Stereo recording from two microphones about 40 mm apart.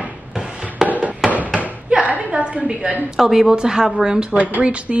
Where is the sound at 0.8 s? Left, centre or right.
Right.